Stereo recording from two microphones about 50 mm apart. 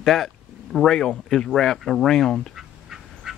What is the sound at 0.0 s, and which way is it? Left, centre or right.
Speech, centre.